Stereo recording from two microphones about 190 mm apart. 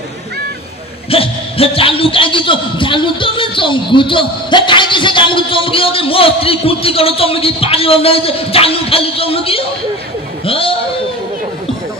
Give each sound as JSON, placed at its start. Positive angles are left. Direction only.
{"t": 1.1, "sound": "a man's voice", "side_deg": 30}